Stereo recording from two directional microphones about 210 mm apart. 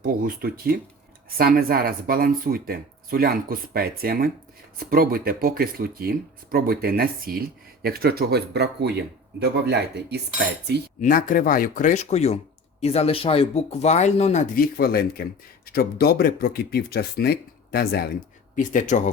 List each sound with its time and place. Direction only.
0.0 s speech: 45° right (ahead or behind)
11.0 s speech: 40° left (ahead or behind)